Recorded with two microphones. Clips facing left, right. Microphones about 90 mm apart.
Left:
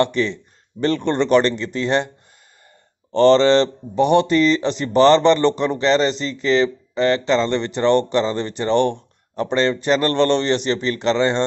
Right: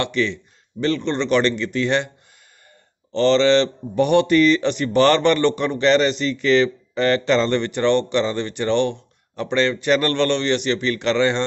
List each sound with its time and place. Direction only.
0.0 s speech: 35° left (ahead or behind)
3.1 s speech: 45° left (ahead or behind); by 7.9 s 25° left (ahead or behind)
7.9 s speech: 40° left (ahead or behind)